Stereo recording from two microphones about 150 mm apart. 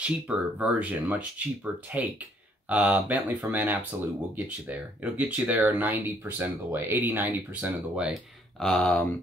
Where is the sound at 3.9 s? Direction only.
20° right (ahead or behind).